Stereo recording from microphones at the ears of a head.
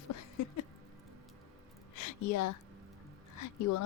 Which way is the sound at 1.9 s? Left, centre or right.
Left.